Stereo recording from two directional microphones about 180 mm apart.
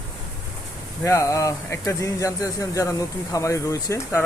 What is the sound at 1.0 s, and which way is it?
Speech, 15° left (ahead or behind).